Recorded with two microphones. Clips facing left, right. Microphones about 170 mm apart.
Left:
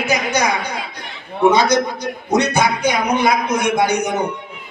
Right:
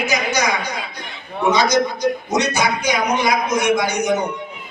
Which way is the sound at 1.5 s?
55° left (ahead or behind).